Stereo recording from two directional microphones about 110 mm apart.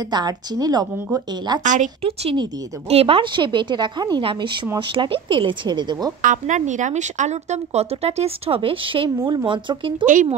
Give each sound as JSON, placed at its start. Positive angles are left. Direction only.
{"t": 0.1, "sound": "speech", "side_deg": -40}
{"t": 1.8, "sound": "a woman's voice", "side_deg": -70}
{"t": 4.2, "sound": "speech", "side_deg": -50}
{"t": 6.3, "sound": "speech", "side_deg": -90}
{"t": 9.2, "sound": "speech", "side_deg": -40}